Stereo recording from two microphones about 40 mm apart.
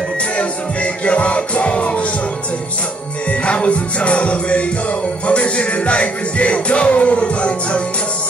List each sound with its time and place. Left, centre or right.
0.4 s music: left
3.3 s music: left